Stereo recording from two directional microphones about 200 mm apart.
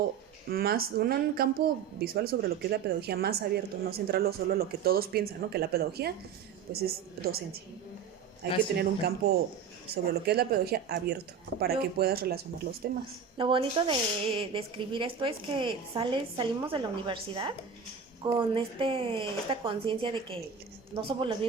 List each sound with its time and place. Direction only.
0.5 s speech: 50° right (ahead or behind)
8.4 s speech: 50° right (ahead or behind)
13.3 s speech: 25° right (ahead or behind)